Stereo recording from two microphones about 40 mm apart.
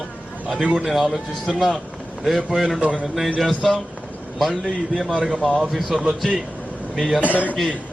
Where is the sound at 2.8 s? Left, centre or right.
Right.